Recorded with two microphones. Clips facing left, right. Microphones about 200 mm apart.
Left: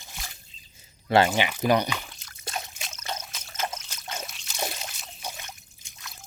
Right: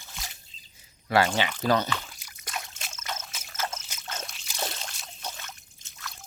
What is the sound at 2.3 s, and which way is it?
Trickle, 30° left (ahead or behind).